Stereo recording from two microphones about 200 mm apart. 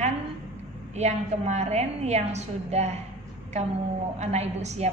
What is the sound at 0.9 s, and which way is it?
A woman's voice, 35° right (ahead or behind).